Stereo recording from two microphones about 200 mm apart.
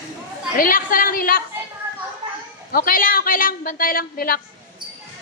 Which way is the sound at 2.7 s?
45° left (ahead or behind).